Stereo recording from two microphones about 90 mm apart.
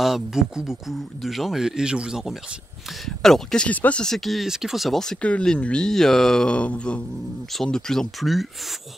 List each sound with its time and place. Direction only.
0.0 s speech: 5° right (ahead or behind)
3.2 s speech: 5° left (ahead or behind)
3.6 s speech: 15° left (ahead or behind)
4.0 s speech: centre (ahead or behind)